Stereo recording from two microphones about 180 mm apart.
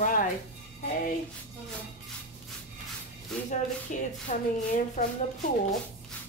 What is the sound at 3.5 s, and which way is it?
A woman's voice, 45° left (ahead or behind).